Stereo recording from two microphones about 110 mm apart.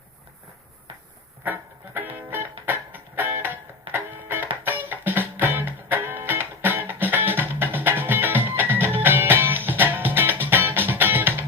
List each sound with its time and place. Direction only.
1.5 s music: 15° right (ahead or behind)